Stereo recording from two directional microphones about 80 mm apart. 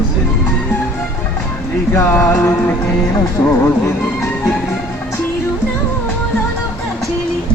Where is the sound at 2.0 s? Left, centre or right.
Left.